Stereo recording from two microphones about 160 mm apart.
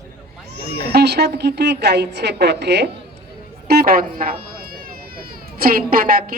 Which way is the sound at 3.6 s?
75° right (ahead or behind).